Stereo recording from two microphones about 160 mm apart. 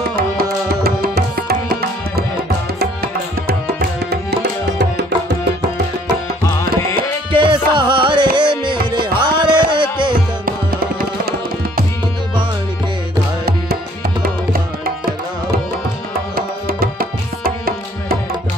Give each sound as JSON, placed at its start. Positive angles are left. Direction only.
{"t": 0.1, "sound": "music", "side_deg": -70}
{"t": 4.1, "sound": "tabla", "side_deg": -90}
{"t": 7.3, "sound": "music", "side_deg": -30}
{"t": 10.4, "sound": "tabla", "side_deg": -65}
{"t": 16.3, "sound": "tabla", "side_deg": -65}